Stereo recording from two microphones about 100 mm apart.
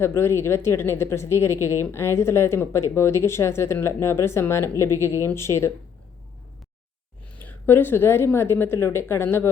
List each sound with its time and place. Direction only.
0.0 s speech: 25° left (ahead or behind)
7.3 s speech: 20° left (ahead or behind)